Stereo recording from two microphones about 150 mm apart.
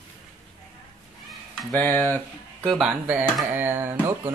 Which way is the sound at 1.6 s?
5° left (ahead or behind).